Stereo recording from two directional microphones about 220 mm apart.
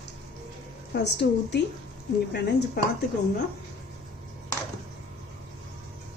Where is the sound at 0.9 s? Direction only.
50° left (ahead or behind).